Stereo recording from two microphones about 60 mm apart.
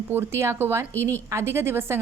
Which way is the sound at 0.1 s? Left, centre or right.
Right.